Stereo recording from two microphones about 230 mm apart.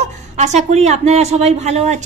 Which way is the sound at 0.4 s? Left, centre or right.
Right.